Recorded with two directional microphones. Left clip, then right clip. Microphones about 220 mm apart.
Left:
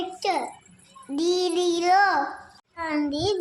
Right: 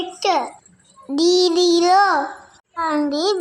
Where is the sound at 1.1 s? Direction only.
25° right (ahead or behind).